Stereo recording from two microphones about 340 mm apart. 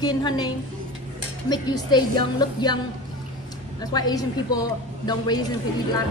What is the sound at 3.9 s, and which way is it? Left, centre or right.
A woman's voice, centre.